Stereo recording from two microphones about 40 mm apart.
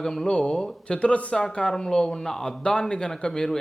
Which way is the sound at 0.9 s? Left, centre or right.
Left.